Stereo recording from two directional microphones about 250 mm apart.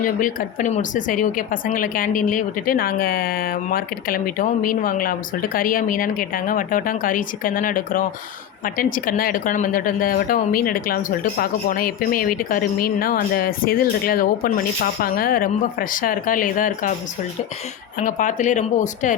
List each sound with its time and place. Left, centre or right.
0.0 s speech: left
18.0 s speech: left